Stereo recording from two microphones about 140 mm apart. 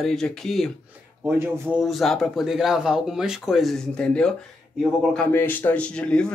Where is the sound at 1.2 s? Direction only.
15° right (ahead or behind).